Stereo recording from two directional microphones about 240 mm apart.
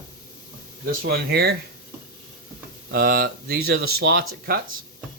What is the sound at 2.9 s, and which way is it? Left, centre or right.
Speech, right.